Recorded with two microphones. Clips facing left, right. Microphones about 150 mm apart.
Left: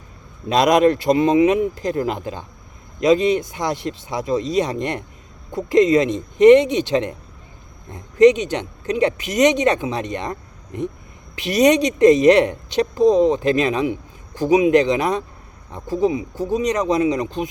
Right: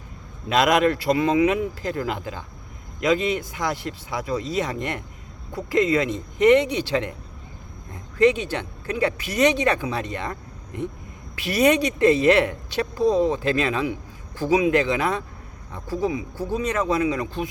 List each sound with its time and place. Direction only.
0.4 s a woman's voice: 20° left (ahead or behind)
11.3 s a woman's voice: 20° left (ahead or behind)